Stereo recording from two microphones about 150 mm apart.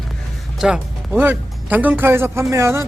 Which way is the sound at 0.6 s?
5° right (ahead or behind).